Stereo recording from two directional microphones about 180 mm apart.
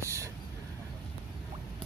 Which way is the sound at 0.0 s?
15° right (ahead or behind).